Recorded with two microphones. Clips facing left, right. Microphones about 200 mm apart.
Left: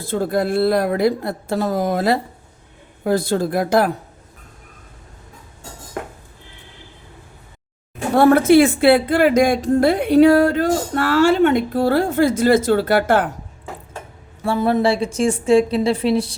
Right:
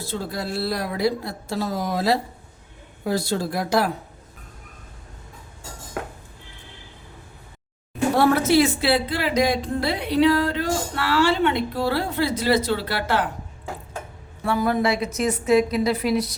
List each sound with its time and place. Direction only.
0.0 s a woman's voice: 55° left (ahead or behind)
8.1 s a woman's voice: 55° left (ahead or behind)
14.4 s a woman's voice: 30° left (ahead or behind)